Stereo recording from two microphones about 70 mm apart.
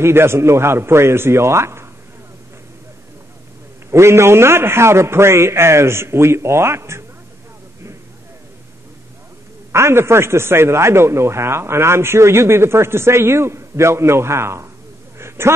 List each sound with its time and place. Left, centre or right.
0.0 s a man's voice: right
3.9 s a man's voice: right
9.7 s a man's voice: right
15.1 s a sound: right